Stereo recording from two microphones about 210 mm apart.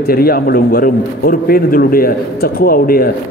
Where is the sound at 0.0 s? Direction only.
45° left (ahead or behind).